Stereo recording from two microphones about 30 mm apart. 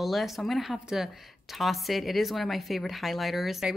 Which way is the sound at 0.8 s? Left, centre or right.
Centre.